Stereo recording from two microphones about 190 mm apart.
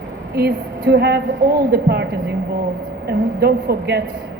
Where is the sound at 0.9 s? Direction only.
55° right (ahead or behind).